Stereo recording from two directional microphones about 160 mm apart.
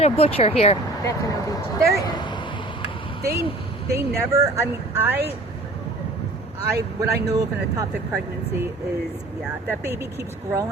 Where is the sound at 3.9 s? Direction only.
20° right (ahead or behind).